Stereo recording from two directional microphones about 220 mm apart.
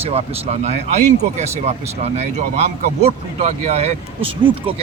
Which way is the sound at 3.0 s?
30° right (ahead or behind).